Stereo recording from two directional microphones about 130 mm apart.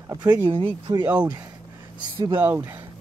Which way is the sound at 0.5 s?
40° right (ahead or behind).